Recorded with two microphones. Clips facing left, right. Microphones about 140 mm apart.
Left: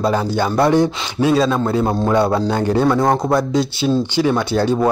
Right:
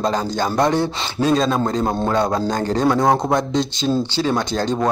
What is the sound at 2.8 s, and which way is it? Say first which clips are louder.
Speech: right 2 dB; centre (ahead or behind).